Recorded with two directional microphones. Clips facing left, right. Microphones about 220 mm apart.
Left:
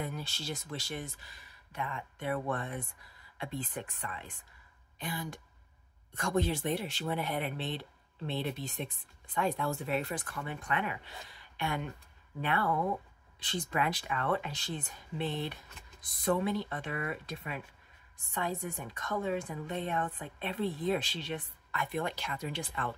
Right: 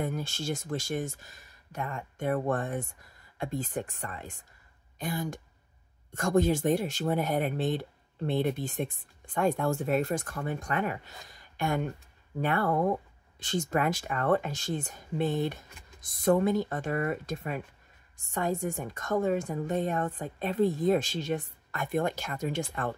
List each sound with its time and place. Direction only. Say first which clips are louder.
0.0 s speech: right 6 dB; 50° right (ahead or behind)